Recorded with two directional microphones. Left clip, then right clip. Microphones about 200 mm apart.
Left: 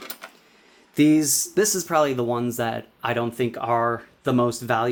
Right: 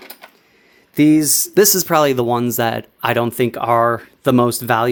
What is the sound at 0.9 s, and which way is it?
Speech, 40° right (ahead or behind).